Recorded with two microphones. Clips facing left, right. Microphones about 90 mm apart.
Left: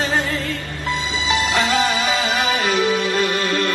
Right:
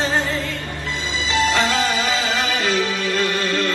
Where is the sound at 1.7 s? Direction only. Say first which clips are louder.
Left 1 dB; 20° left (ahead or behind).